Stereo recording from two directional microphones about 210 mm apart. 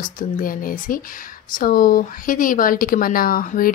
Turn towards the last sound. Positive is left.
turn(degrees=40)  # may be behind; listen again after turning